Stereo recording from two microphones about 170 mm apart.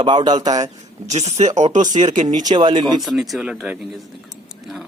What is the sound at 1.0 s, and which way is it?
Speech, 40° right (ahead or behind).